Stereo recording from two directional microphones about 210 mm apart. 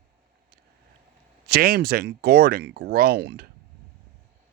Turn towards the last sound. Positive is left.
turn(degrees=-50)  # may be behind; listen again after turning